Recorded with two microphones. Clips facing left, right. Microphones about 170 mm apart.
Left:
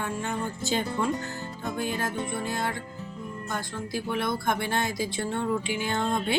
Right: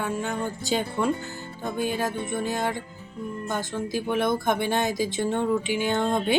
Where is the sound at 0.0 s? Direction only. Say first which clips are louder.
Right 3 dB; 15° right (ahead or behind).